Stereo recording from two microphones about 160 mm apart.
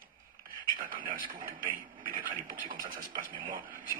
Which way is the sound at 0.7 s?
60° right (ahead or behind).